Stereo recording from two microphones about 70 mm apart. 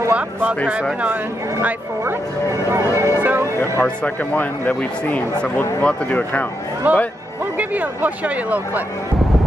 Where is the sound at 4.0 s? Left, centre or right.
Left.